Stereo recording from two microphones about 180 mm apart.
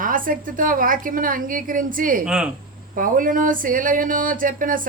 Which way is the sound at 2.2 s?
5° right (ahead or behind).